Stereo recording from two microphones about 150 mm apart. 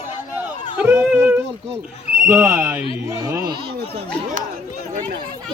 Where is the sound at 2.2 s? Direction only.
15° right (ahead or behind).